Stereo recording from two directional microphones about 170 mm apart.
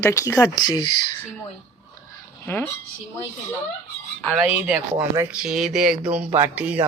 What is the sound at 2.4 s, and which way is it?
Speech, 15° left (ahead or behind).